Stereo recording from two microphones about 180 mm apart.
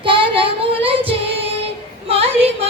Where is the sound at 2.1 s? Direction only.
35° right (ahead or behind).